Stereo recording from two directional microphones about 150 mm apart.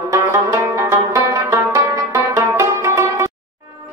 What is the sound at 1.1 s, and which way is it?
Music, 25° right (ahead or behind).